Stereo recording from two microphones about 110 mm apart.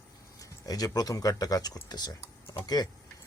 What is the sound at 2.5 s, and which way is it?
Typing, 25° left (ahead or behind).